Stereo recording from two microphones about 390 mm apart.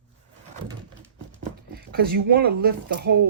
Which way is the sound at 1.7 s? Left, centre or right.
Right.